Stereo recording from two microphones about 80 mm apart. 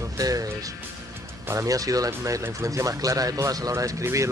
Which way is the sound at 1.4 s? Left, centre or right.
Right.